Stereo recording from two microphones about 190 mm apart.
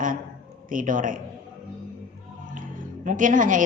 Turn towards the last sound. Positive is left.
turn(degrees=-45)  # may be behind; listen again after turning